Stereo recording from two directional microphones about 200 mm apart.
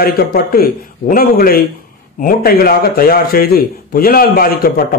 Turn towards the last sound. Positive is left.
turn(degrees=50)  # may be behind; listen again after turning